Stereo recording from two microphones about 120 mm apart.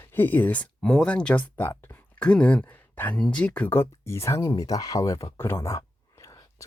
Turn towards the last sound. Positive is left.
turn(degrees=25)  # may be behind; listen again after turning